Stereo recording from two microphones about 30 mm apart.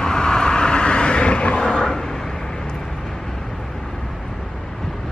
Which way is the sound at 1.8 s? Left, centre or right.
Centre.